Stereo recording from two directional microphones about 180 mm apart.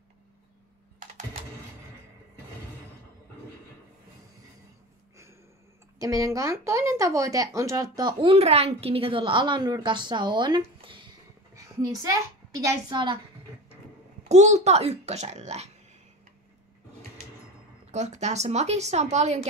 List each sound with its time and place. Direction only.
5.9 s a woman's voice: 20° right (ahead or behind)
14.3 s a woman's voice: 40° right (ahead or behind)
17.9 s a woman's voice: 40° right (ahead or behind)